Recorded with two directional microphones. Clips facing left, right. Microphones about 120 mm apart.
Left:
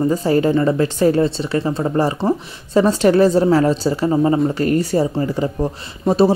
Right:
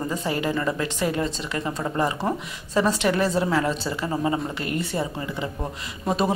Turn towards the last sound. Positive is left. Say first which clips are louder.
# left 9 dB
turn(degrees=30)  # may be behind; listen again after turning